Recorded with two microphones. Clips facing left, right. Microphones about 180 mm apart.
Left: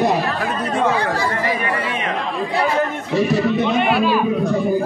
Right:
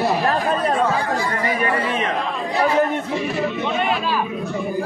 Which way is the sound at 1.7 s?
40° right (ahead or behind).